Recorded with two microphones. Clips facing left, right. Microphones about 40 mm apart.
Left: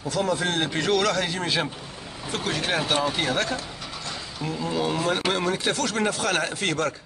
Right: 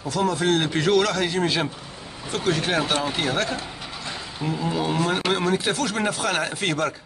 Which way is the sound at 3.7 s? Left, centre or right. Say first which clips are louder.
Right 1 dB; centre.